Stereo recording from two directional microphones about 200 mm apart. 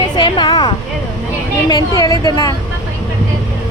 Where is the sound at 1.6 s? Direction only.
20° left (ahead or behind).